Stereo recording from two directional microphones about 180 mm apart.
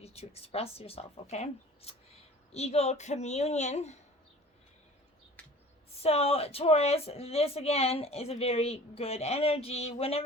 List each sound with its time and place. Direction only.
0.0 s speech: 35° left (ahead or behind)
6.0 s speech: 35° left (ahead or behind)